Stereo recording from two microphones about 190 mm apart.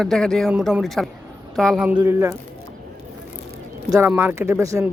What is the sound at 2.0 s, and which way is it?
Speech, 15° right (ahead or behind).